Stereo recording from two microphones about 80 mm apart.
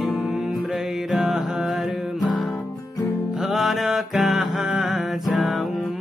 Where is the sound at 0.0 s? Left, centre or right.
Centre.